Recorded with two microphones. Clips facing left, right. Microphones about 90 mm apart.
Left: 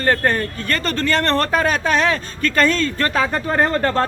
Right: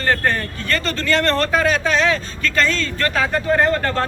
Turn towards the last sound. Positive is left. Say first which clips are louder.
# even
turn(degrees=30)  # may be behind; listen again after turning